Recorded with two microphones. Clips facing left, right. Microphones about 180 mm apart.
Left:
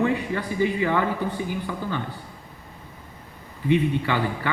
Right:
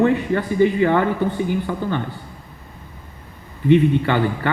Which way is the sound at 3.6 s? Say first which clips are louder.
Right 7 dB; 60° right (ahead or behind).